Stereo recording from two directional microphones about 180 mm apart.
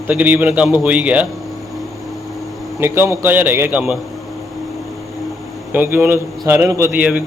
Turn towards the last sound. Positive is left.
turn(degrees=-10)  # may be behind; listen again after turning